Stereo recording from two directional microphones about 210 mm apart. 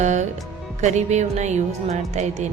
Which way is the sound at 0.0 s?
35° right (ahead or behind).